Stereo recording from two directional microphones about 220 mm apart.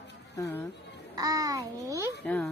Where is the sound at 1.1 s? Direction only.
15° right (ahead or behind).